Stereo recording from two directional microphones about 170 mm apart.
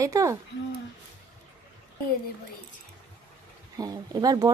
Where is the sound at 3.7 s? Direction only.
20° right (ahead or behind).